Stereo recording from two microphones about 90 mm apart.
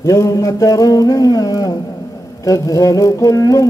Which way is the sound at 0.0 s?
40° left (ahead or behind).